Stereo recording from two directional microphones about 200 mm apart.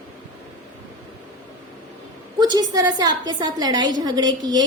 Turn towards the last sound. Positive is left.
turn(degrees=-20)  # may be behind; listen again after turning